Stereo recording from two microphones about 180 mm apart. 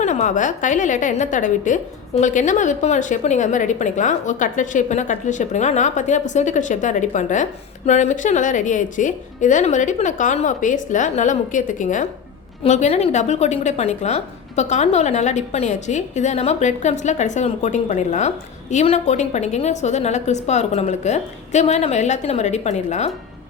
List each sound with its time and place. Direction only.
0.0 s a woman's voice: 40° left (ahead or behind)